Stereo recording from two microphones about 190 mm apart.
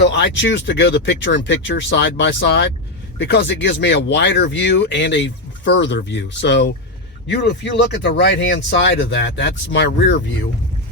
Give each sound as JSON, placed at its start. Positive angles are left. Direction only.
{"t": 0.0, "sound": "speech", "side_deg": 65}